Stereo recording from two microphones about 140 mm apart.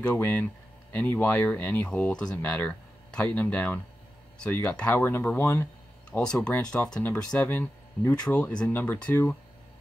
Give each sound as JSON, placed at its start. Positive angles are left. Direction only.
{"t": 0.0, "sound": "speech", "side_deg": 10}
{"t": 2.4, "sound": "speech", "side_deg": 20}